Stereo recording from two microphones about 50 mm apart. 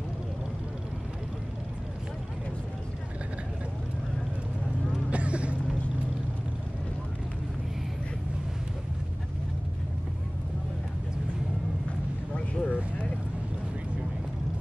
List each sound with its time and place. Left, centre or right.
5.1 s vehicle: right
12.4 s vehicle: centre